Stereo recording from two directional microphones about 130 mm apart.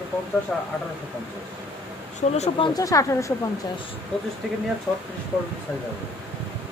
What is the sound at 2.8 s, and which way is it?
Speech, 25° left (ahead or behind).